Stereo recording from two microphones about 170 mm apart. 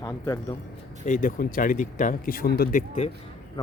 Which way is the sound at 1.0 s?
50° left (ahead or behind).